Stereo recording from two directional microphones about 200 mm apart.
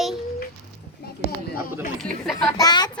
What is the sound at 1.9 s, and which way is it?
Speech, centre (ahead or behind).